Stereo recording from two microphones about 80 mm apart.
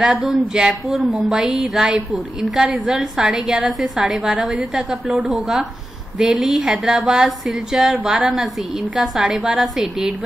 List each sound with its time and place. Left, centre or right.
0.0 s speech: centre
5.3 s a woman's voice: centre
7.9 s a woman's voice: centre